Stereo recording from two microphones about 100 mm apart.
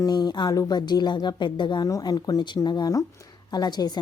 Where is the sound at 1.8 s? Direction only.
40° left (ahead or behind).